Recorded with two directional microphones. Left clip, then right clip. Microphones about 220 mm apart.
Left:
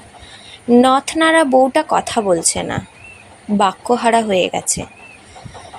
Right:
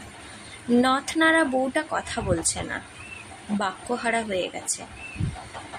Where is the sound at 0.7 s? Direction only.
30° left (ahead or behind).